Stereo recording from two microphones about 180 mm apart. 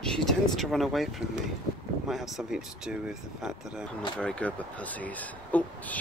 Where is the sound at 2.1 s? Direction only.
Centre (ahead or behind).